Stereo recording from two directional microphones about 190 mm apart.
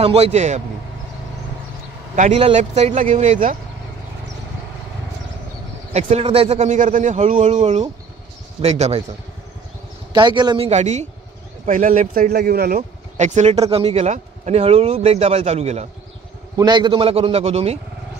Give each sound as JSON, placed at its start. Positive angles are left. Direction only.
{"t": 0.0, "sound": "speech", "side_deg": -30}
{"t": 2.1, "sound": "speech", "side_deg": -35}
{"t": 5.9, "sound": "speech", "side_deg": -30}
{"t": 8.5, "sound": "speech", "side_deg": -35}
{"t": 10.1, "sound": "a man's voice", "side_deg": -25}
{"t": 10.7, "sound": "speech", "side_deg": -35}
{"t": 16.5, "sound": "a man's voice", "side_deg": -25}